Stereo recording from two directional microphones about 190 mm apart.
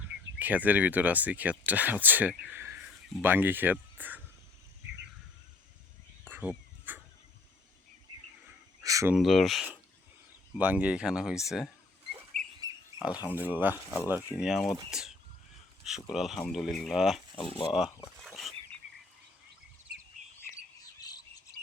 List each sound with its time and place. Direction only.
0.0 s speech: 10° right (ahead or behind)
6.2 s a sound: 10° right (ahead or behind)
8.8 s speech: 15° right (ahead or behind)
9.1 s speech: centre (ahead or behind)
12.3 s bird: 40° right (ahead or behind)
13.0 s speech: 5° right (ahead or behind)
17.3 s speech: 30° left (ahead or behind)
17.7 s speech: centre (ahead or behind)
18.2 s a sound: centre (ahead or behind)